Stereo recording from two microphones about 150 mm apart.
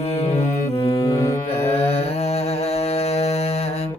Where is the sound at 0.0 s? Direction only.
45° left (ahead or behind).